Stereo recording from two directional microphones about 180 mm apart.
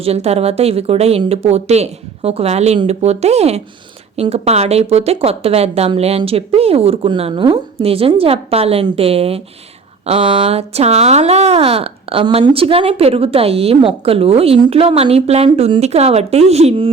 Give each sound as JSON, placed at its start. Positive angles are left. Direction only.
{"t": 0.0, "sound": "speech", "side_deg": -35}